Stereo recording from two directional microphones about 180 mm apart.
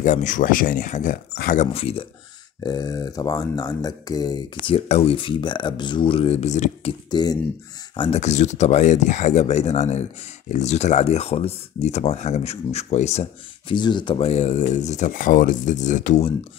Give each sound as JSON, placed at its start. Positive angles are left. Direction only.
{"t": 0.0, "sound": "speech", "side_deg": 45}
{"t": 1.3, "sound": "speech", "side_deg": 60}
{"t": 1.6, "sound": "speech", "side_deg": 35}
{"t": 2.6, "sound": "speech", "side_deg": 20}
{"t": 4.7, "sound": "speech", "side_deg": 35}